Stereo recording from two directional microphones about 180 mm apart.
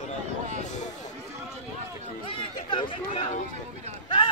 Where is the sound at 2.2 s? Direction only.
30° left (ahead or behind).